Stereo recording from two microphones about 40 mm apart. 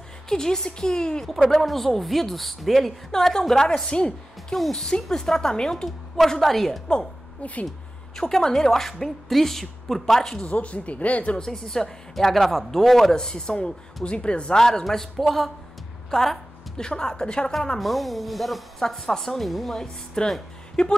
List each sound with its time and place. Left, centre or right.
0.3 s a woman's voice: centre
1.6 s a woman's voice: centre
5.9 s a woman's voice: centre
8.2 s a woman's voice: centre
10.5 s speech: left
11.3 s a woman's voice: centre
13.1 s speech: centre
14.6 s a woman's voice: centre
16.7 s speech: centre
17.7 s a woman's voice: centre
20.2 s a woman's voice: centre